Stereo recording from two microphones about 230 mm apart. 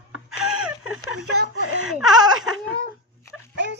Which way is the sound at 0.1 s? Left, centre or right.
Centre.